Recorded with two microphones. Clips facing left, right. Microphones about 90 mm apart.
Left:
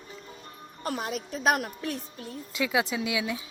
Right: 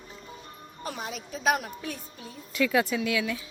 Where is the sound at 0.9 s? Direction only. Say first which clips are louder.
Left 4 dB; 55° left (ahead or behind).